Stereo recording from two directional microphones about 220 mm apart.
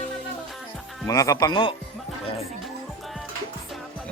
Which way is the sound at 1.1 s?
15° left (ahead or behind).